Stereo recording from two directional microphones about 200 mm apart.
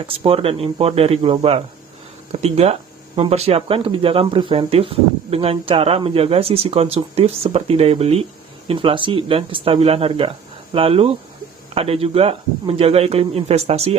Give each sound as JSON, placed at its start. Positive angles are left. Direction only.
{"t": 0.0, "sound": "a man's voice", "side_deg": -25}